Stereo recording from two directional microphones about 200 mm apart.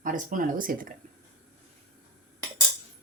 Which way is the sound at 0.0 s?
40° right (ahead or behind).